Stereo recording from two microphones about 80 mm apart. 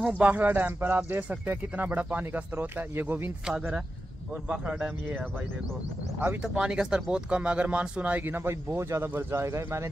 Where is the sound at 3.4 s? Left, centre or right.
Centre.